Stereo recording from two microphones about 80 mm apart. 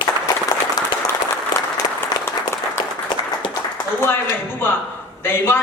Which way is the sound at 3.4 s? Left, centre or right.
Left.